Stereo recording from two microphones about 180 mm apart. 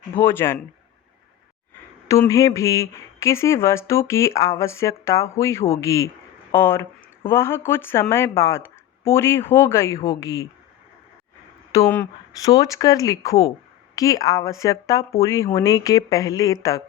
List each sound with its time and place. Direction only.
0.2 s speech: 10° left (ahead or behind)
2.0 s speech: 15° left (ahead or behind)
11.7 s speech: 15° left (ahead or behind)